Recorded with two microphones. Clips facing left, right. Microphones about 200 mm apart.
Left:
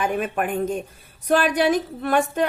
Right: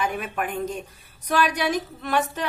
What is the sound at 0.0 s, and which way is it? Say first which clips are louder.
A woman's voice: left 4 dB; 45° left (ahead or behind).